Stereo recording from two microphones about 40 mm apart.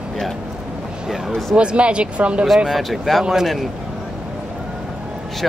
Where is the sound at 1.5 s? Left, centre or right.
Right.